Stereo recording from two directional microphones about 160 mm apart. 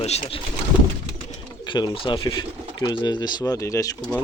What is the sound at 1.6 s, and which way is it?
Speech, 25° left (ahead or behind).